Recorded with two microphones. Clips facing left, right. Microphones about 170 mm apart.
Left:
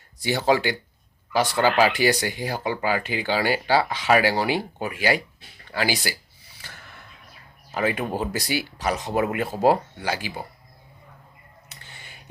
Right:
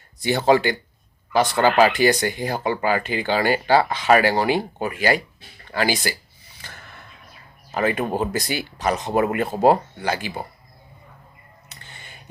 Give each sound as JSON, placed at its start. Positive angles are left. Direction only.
{"t": 0.2, "sound": "speech", "side_deg": 10}
{"t": 1.5, "sound": "speech", "side_deg": -50}
{"t": 1.8, "sound": "speech", "side_deg": 10}
{"t": 6.6, "sound": "gasp", "side_deg": 10}
{"t": 7.7, "sound": "speech", "side_deg": 10}
{"t": 11.8, "sound": "music", "side_deg": 10}